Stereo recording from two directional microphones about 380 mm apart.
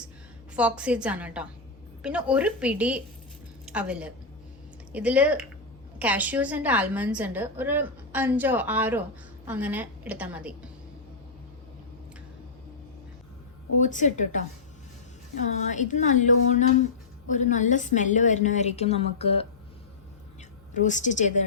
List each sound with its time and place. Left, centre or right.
0.5 s a woman's voice: centre
13.7 s a woman's voice: centre
15.7 s a woman's voice: centre
20.7 s a woman's voice: centre